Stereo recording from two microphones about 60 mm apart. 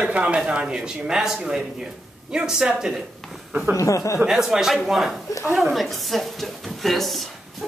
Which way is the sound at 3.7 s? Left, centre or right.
Left.